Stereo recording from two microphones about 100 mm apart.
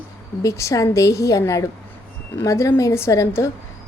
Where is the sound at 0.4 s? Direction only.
30° left (ahead or behind).